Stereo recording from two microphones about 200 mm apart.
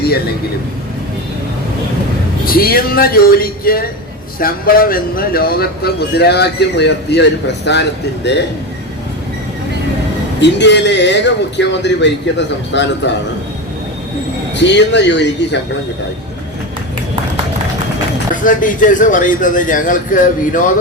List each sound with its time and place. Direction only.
2.5 s speech: 50° left (ahead or behind)
10.4 s a man's voice: 60° left (ahead or behind)
14.5 s a man's voice: 60° left (ahead or behind)
18.4 s a man's voice: 40° left (ahead or behind)